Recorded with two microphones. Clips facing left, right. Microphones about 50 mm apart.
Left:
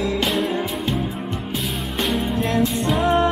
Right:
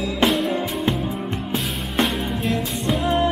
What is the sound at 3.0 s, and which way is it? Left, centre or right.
Music, left.